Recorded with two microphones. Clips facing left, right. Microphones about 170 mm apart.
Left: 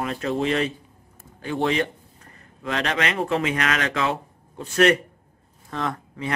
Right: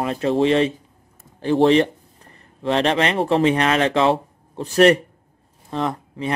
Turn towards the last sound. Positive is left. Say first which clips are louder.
# right 4 dB
turn(degrees=-20)  # may be behind; listen again after turning